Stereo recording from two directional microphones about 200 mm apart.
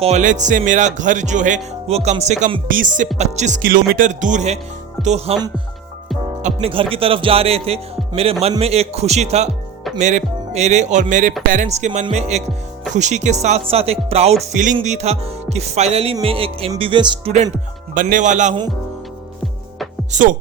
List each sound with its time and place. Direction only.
0.0 s speech: 35° right (ahead or behind)
6.4 s music: 30° right (ahead or behind)
10.0 s speech: 35° right (ahead or behind)
16.1 s music: 25° right (ahead or behind)
17.9 s speech: 40° right (ahead or behind)
20.1 s speech: 40° right (ahead or behind)